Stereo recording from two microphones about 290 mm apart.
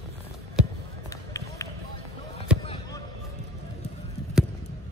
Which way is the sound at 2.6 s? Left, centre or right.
Centre.